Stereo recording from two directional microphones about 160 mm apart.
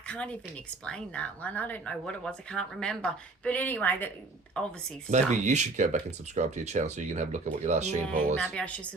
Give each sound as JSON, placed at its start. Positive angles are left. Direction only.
{"t": 0.1, "sound": "speech", "side_deg": 5}
{"t": 5.1, "sound": "speech", "side_deg": -45}
{"t": 8.5, "sound": "speech", "side_deg": 10}